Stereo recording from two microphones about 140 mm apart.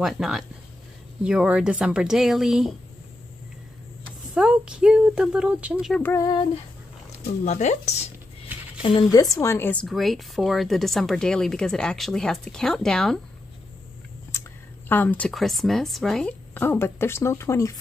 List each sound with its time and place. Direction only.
0.0 s speech: centre (ahead or behind)
4.3 s speech: 5° right (ahead or behind)
6.1 s female singing: 30° left (ahead or behind)
7.4 s speech: 55° left (ahead or behind)
9.1 s speech: 25° left (ahead or behind)
9.8 s speech: centre (ahead or behind)
14.9 s speech: 15° left (ahead or behind)
16.5 s speech: 15° left (ahead or behind)